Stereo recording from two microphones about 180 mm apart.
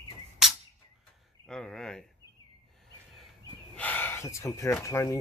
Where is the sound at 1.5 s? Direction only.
5° left (ahead or behind).